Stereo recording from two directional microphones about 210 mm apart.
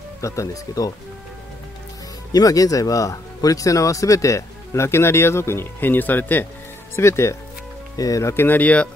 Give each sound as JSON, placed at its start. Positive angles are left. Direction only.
{"t": 0.2, "sound": "speech", "side_deg": 15}
{"t": 2.3, "sound": "speech", "side_deg": 15}